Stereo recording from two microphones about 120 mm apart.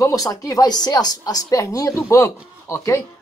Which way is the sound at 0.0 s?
30° left (ahead or behind).